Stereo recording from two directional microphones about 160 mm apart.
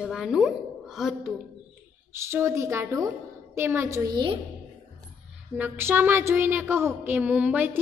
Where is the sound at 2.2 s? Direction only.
15° right (ahead or behind).